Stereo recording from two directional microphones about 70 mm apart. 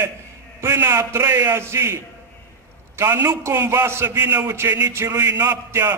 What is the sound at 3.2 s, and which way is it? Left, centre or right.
A man's voice, right.